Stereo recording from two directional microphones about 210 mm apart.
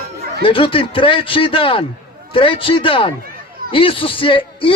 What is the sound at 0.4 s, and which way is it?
A man's voice, 25° left (ahead or behind).